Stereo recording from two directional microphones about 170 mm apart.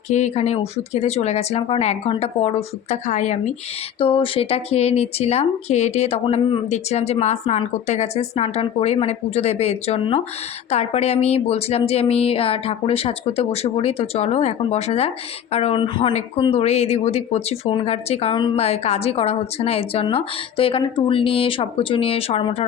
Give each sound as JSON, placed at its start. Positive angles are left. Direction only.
{"t": 0.1, "sound": "speech", "side_deg": 40}
{"t": 4.0, "sound": "speech", "side_deg": 30}